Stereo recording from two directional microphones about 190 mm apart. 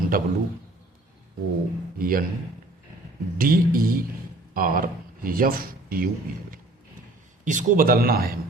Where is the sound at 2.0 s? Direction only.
45° right (ahead or behind).